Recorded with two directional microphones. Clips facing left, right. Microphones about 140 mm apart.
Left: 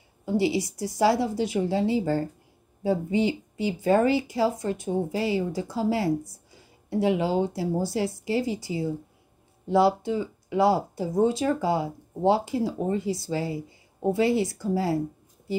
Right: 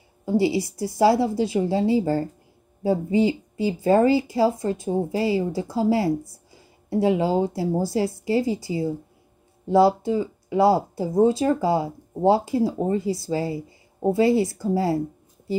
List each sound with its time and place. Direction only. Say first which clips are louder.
0.2 s speech: right 3 dB; 35° right (ahead or behind)